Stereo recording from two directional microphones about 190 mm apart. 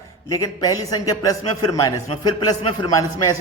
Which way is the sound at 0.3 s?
20° left (ahead or behind).